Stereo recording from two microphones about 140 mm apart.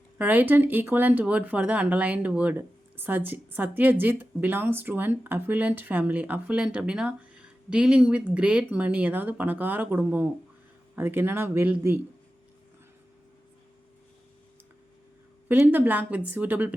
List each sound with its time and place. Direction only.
0.2 s speech: 10° right (ahead or behind)
15.4 s speech: 15° right (ahead or behind)